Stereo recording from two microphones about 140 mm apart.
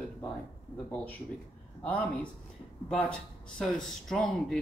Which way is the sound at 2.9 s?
5° left (ahead or behind).